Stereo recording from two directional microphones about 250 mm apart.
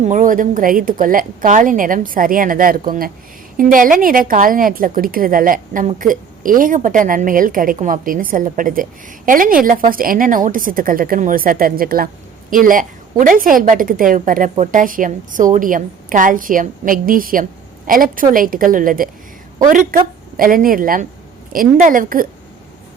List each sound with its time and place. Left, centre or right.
0.0 s a woman's voice: right